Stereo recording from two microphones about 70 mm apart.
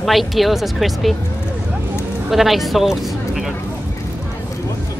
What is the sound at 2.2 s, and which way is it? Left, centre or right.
Speech, centre.